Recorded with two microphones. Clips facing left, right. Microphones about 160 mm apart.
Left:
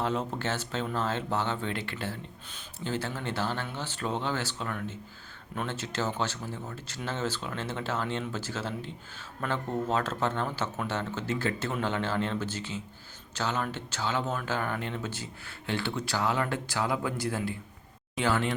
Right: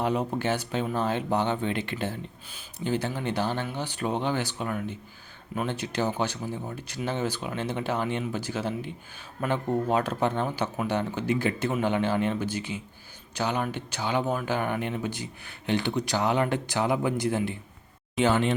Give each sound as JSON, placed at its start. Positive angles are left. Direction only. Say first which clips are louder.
{"t": 0.0, "sound": "speech", "louder": "right 4 dB", "side_deg": -15}